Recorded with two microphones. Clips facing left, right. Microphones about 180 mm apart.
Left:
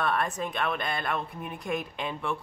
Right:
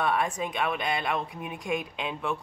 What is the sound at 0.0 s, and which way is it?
Speech, 10° right (ahead or behind).